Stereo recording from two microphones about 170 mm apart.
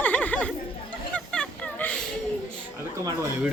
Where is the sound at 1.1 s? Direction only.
5° left (ahead or behind).